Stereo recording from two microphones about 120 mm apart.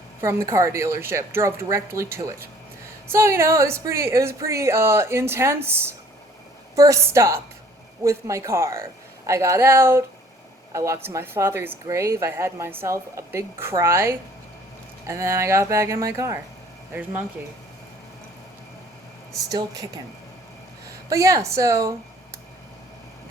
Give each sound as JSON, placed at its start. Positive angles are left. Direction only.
{"t": 0.2, "sound": "speech", "side_deg": -25}
{"t": 16.9, "sound": "speech", "side_deg": -15}
{"t": 19.5, "sound": "speech", "side_deg": -30}
{"t": 21.1, "sound": "speech", "side_deg": -25}